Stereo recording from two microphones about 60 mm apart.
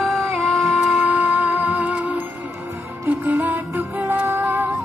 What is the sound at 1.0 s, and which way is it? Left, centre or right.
Music, right.